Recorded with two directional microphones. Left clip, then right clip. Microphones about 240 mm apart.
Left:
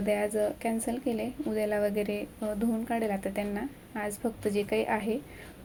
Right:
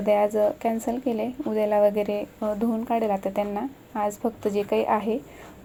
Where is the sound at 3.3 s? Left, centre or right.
Centre.